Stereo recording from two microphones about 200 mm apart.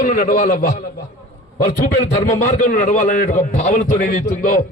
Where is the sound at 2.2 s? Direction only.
45° left (ahead or behind).